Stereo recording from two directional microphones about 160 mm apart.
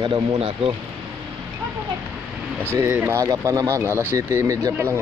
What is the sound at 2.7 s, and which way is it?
Speech, 15° right (ahead or behind).